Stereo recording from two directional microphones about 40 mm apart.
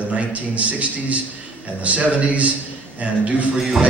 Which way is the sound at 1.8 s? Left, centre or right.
Right.